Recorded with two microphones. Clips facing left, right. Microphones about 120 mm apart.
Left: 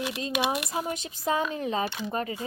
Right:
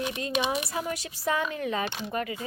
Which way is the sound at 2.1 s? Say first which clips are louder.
Left 1 dB; 30° left (ahead or behind).